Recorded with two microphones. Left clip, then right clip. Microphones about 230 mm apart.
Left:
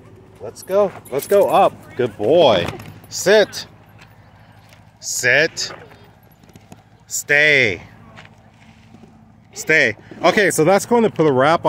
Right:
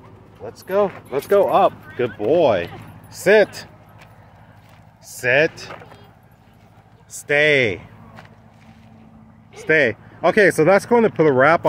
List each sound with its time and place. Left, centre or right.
0.5 s speech: centre
3.3 s speech: centre
5.1 s speech: centre
7.2 s speech: centre
9.7 s speech: centre